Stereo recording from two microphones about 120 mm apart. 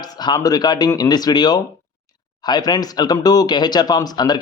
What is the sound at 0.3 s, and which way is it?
Speech, 30° left (ahead or behind).